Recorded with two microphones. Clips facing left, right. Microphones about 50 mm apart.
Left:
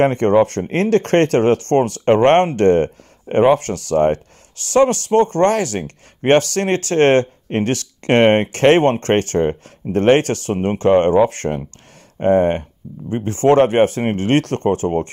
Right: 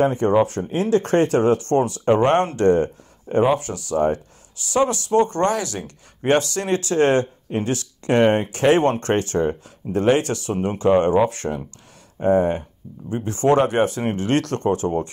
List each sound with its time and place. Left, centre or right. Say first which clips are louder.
0.0 s speech: left 4 dB; left
13.1 s speech: left 4 dB; left